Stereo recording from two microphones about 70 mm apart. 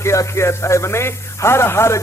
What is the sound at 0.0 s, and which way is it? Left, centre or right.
A man's voice, left.